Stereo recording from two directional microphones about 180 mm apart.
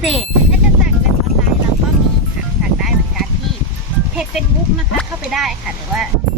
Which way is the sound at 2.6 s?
5° right (ahead or behind).